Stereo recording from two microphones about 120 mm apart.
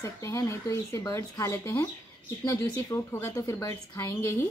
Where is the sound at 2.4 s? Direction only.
35° left (ahead or behind).